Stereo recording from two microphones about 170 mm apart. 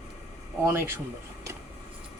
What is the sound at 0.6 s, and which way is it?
Speech, 15° right (ahead or behind).